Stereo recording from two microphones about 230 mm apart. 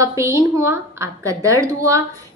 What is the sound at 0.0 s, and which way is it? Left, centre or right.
A woman's voice, centre.